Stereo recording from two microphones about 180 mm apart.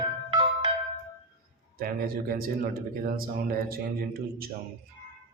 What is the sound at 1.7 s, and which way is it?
Speech, 55° right (ahead or behind).